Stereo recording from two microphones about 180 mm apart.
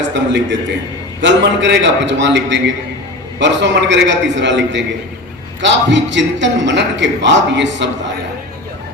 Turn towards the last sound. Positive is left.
turn(degrees=-85)